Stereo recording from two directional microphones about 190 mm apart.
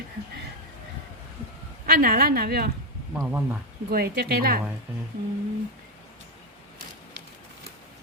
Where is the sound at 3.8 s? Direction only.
55° right (ahead or behind).